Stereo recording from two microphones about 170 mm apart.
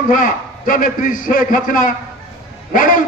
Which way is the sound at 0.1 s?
55° left (ahead or behind).